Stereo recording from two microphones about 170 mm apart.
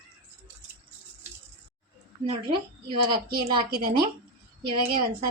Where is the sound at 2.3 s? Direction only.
30° right (ahead or behind).